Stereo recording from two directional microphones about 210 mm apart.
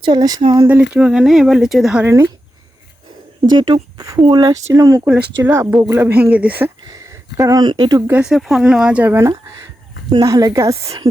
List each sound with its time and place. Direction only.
0.0 s speech: 20° right (ahead or behind)
0.9 s speech: 5° right (ahead or behind)
3.6 s speech: 20° right (ahead or behind)